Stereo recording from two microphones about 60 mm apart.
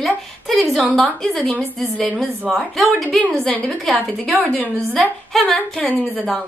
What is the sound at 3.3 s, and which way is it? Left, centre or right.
Speech, centre.